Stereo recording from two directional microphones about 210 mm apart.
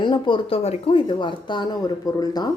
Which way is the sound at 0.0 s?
20° left (ahead or behind).